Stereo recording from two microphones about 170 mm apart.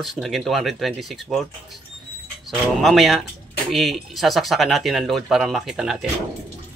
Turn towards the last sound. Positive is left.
turn(degrees=0)  # may be behind; listen again after turning